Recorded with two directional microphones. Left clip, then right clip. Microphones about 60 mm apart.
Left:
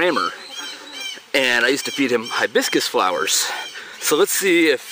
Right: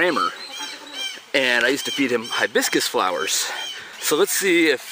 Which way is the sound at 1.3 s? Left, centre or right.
Left.